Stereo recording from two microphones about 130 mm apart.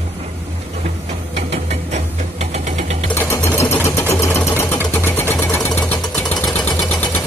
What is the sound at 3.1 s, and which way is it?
Sewing machine, 20° left (ahead or behind).